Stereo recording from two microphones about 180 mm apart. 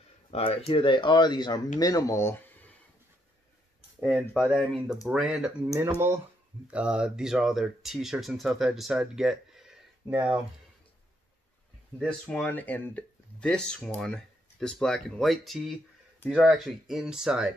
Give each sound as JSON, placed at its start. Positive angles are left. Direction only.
{"t": 0.3, "sound": "speech", "side_deg": 30}
{"t": 4.0, "sound": "speech", "side_deg": -5}
{"t": 12.0, "sound": "speech", "side_deg": 5}